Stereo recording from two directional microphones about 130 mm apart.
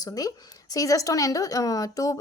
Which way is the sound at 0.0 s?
30° left (ahead or behind).